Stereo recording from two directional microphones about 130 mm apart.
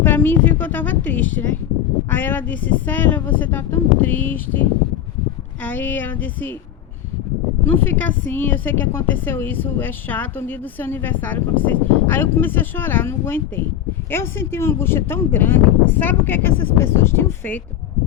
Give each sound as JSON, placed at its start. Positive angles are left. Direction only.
{"t": 0.0, "sound": "a woman's voice", "side_deg": 15}
{"t": 5.6, "sound": "a woman's voice", "side_deg": 15}
{"t": 7.6, "sound": "a woman's voice", "side_deg": 15}